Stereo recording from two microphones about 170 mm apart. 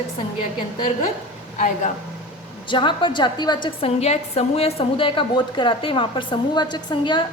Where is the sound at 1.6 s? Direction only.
45° left (ahead or behind).